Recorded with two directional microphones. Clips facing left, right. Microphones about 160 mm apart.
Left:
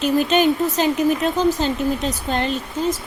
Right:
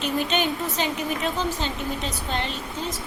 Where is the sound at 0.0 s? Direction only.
45° left (ahead or behind).